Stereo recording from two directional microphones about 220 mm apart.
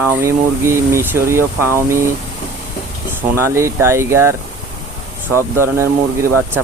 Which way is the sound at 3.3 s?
10° right (ahead or behind).